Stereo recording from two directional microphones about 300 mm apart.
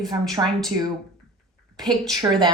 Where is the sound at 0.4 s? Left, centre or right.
Centre.